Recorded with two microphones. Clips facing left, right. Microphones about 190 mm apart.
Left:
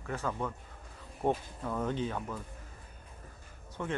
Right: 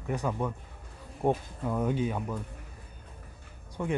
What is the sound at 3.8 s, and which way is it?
Speech, 15° right (ahead or behind).